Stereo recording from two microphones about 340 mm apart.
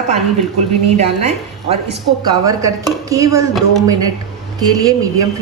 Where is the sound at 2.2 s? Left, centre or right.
Centre.